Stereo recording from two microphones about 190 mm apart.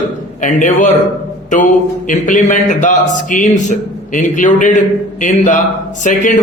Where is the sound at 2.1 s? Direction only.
45° left (ahead or behind).